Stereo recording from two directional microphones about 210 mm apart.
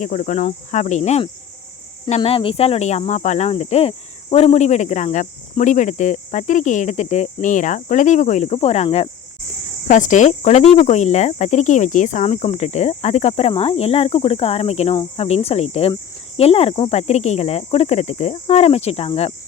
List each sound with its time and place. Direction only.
0.0 s speech: 40° left (ahead or behind)
14.9 s cricket: 30° left (ahead or behind)
16.4 s speech: 30° left (ahead or behind)